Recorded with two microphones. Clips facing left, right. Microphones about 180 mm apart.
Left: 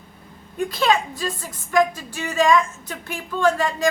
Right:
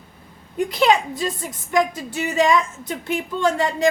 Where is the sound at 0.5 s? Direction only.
15° right (ahead or behind).